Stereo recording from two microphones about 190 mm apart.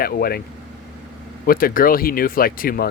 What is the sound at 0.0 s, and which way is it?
Speech, 50° left (ahead or behind).